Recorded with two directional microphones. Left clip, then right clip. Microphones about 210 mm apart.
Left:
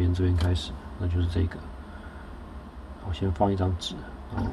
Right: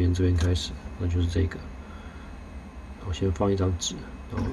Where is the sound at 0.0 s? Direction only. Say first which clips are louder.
Right 2 dB; centre (ahead or behind).